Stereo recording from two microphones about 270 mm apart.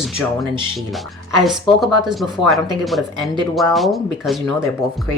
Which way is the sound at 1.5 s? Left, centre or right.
Centre.